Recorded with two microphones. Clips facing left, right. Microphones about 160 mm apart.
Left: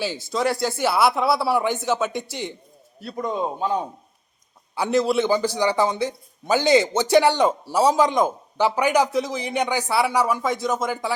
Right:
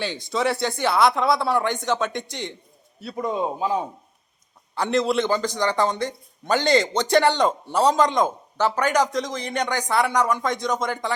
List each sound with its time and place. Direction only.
0.0 s a man's voice: 5° left (ahead or behind)